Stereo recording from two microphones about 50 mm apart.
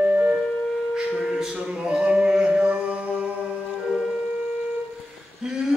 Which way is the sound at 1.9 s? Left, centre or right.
Centre.